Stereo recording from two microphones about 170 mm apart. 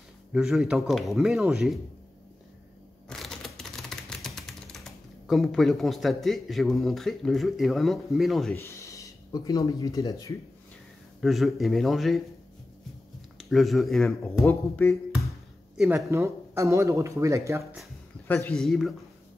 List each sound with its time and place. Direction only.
0.3 s speech: 5° right (ahead or behind)
3.1 s typing: centre (ahead or behind)
8.5 s speech: 15° left (ahead or behind)
11.1 s speech: centre (ahead or behind)
13.4 s speech: centre (ahead or behind)
14.3 s speech: 15° left (ahead or behind)
15.8 s speech: 15° right (ahead or behind)
18.2 s speech: 10° left (ahead or behind)